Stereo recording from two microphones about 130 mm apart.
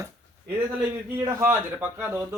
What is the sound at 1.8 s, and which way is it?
Speech, 15° right (ahead or behind).